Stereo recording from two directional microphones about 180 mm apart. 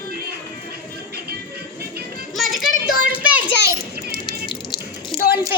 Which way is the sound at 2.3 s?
Centre (ahead or behind).